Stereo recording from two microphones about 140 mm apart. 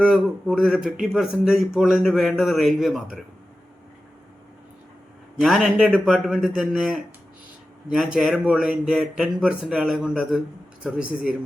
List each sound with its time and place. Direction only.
0.0 s speech: 5° right (ahead or behind)
5.4 s a man's voice: 5° right (ahead or behind)